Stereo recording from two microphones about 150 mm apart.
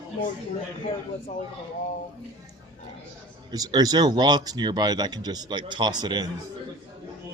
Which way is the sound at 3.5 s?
25° right (ahead or behind).